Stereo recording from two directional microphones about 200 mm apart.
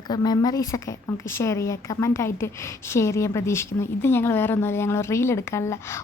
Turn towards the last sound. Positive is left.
turn(degrees=15)  # may be behind; listen again after turning